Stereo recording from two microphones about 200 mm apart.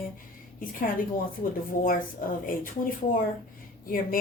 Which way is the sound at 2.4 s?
45° left (ahead or behind).